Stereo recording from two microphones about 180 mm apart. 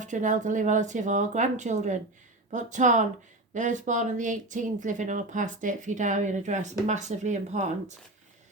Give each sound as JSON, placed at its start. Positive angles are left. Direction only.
{"t": 0.0, "sound": "speech", "side_deg": -45}